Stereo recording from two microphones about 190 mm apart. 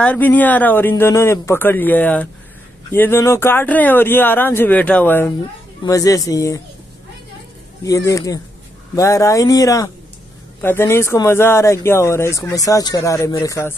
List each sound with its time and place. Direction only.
0.0 s speech: 10° left (ahead or behind)
7.8 s speech: 15° left (ahead or behind)